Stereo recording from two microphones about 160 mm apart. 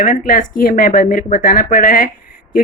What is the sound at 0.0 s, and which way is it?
Speech, 55° left (ahead or behind).